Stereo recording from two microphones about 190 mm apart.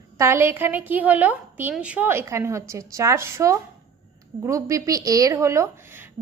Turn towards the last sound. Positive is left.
turn(degrees=-10)  # may be behind; listen again after turning